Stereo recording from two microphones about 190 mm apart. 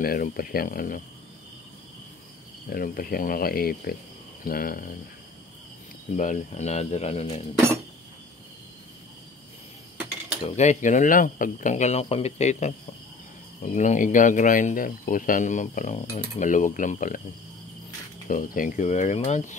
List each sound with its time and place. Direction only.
0.0 s speech: 50° left (ahead or behind)
2.7 s speech: 50° left (ahead or behind)
6.1 s speech: 40° left (ahead or behind)
10.5 s speech: 35° left (ahead or behind)
18.3 s speech: 45° left (ahead or behind)